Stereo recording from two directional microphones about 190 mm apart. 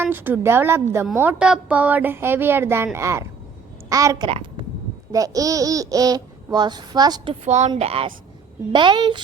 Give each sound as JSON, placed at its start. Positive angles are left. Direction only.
{"t": 0.0, "sound": "speech", "side_deg": -10}
{"t": 4.3, "sound": "a sound", "side_deg": -30}
{"t": 5.1, "sound": "speech", "side_deg": -20}
{"t": 7.4, "sound": "speech", "side_deg": -35}